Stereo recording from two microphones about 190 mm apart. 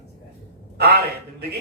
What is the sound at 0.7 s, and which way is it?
Speech, 60° right (ahead or behind).